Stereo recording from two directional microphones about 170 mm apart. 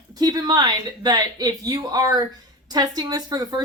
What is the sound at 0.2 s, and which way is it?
Speech, 25° right (ahead or behind).